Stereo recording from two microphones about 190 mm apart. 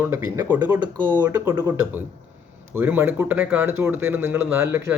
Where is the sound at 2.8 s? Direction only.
10° right (ahead or behind).